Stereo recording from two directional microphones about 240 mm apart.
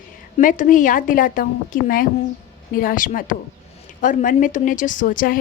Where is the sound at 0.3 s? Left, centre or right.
Left.